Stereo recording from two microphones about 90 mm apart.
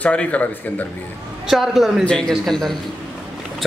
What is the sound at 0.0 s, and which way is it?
Speech, 15° left (ahead or behind).